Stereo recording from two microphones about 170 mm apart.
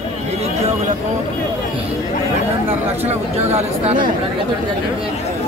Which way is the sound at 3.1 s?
40° right (ahead or behind).